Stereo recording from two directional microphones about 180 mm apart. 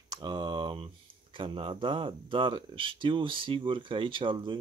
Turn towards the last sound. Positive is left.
turn(degrees=-30)  # may be behind; listen again after turning